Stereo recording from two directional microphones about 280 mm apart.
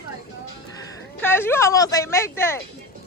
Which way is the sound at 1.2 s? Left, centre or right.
Centre.